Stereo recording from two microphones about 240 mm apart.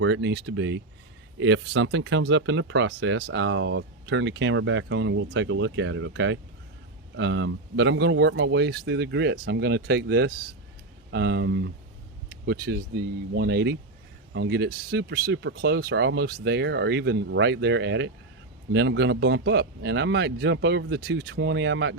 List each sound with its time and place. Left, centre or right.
0.0 s speech: right